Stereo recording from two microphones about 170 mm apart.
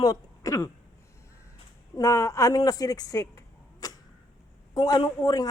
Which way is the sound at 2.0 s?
20° left (ahead or behind).